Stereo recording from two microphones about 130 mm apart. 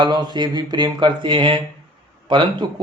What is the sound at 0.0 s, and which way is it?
Speech, 35° right (ahead or behind).